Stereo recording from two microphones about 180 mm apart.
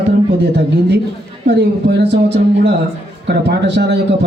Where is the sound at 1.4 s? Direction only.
70° right (ahead or behind).